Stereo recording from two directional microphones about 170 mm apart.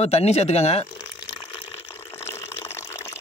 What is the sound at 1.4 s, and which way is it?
Water, 15° left (ahead or behind).